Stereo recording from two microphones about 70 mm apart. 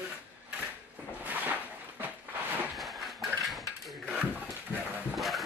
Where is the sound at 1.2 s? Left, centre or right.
Right.